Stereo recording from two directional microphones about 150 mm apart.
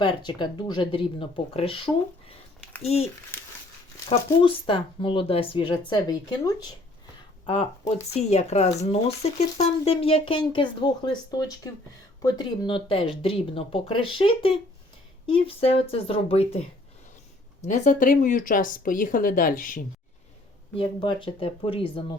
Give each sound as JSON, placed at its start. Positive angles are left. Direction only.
{"t": 0.0, "sound": "speech", "side_deg": 30}
{"t": 3.3, "sound": "a sound", "side_deg": 15}
{"t": 4.3, "sound": "speech", "side_deg": 35}
{"t": 7.4, "sound": "speech", "side_deg": 40}
{"t": 17.6, "sound": "a woman's voice", "side_deg": 55}
{"t": 20.7, "sound": "speech", "side_deg": 30}